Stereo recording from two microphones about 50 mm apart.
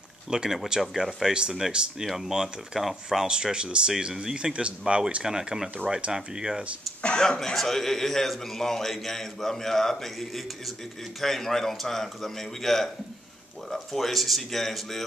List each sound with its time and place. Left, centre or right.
0.3 s speech: centre
3.5 s speech: centre
6.1 s speech: centre
7.0 s a man's voice: centre